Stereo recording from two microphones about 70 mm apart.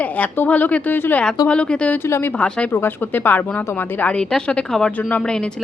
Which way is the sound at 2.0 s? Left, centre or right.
Left.